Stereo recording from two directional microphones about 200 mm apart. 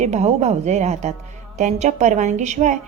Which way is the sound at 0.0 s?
35° right (ahead or behind).